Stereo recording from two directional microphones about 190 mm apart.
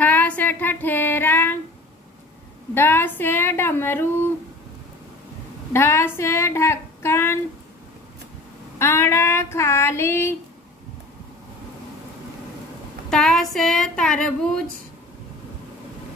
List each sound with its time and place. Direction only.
0.0 s child singing: 10° left (ahead or behind)
2.7 s a woman's voice: 10° left (ahead or behind)
5.7 s speech: 15° left (ahead or behind)
8.7 s child singing: 15° left (ahead or behind)
13.1 s a sound: centre (ahead or behind)